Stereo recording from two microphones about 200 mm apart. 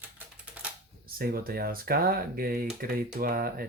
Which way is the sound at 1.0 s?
45° right (ahead or behind).